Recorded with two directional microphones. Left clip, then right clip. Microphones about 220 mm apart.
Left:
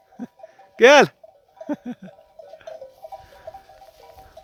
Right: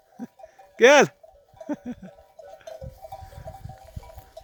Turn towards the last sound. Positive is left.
turn(degrees=-50)  # may be behind; listen again after turning